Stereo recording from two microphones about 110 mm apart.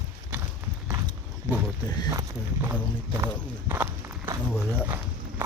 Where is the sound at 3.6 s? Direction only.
20° right (ahead or behind).